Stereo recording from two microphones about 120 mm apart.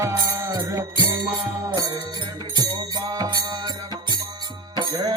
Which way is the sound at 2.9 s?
35° right (ahead or behind).